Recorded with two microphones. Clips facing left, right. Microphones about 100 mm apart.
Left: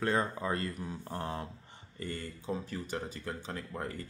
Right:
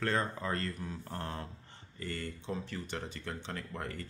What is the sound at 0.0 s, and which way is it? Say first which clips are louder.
Speech: left 2 dB; 15° left (ahead or behind).